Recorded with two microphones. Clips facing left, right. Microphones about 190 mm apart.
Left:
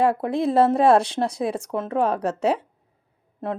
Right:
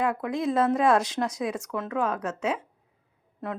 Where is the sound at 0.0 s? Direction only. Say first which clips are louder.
Left 6 dB; 30° left (ahead or behind).